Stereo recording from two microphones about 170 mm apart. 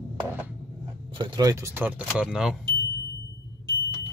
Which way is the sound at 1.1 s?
25° right (ahead or behind).